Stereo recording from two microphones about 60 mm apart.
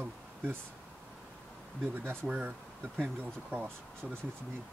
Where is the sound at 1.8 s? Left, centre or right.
Right.